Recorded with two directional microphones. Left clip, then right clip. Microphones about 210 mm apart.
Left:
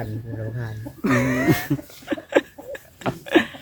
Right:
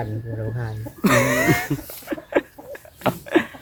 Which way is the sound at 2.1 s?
45° left (ahead or behind).